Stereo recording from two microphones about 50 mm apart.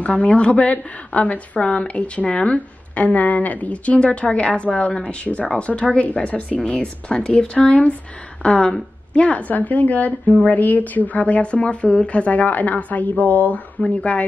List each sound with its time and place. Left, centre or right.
0.0 s a woman's voice: left